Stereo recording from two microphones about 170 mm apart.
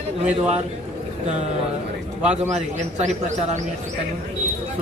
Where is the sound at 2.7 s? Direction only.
45° right (ahead or behind).